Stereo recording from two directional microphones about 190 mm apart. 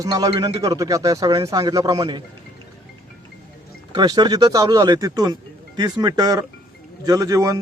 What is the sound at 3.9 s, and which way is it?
A man's voice, 20° right (ahead or behind).